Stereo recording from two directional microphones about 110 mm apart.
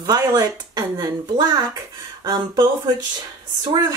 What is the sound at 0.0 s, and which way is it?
Speech, 35° right (ahead or behind).